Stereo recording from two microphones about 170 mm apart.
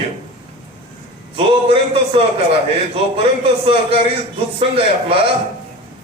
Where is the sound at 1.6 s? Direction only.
35° right (ahead or behind).